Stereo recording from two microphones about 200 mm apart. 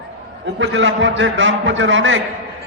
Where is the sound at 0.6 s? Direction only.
70° right (ahead or behind).